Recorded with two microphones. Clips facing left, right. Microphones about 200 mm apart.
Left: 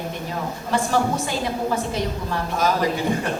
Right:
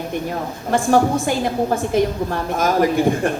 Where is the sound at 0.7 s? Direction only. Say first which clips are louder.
Right 6 dB; 50° right (ahead or behind).